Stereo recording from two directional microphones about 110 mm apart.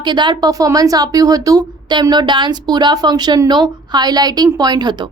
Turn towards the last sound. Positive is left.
turn(degrees=-40)  # may be behind; listen again after turning